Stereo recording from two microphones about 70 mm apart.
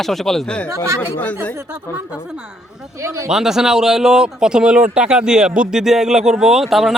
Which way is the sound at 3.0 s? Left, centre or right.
Right.